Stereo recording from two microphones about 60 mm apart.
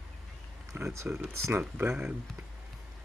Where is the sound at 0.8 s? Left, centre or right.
Right.